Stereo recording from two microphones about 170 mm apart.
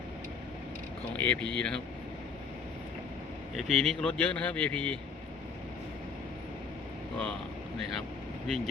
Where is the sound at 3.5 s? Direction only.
Centre (ahead or behind).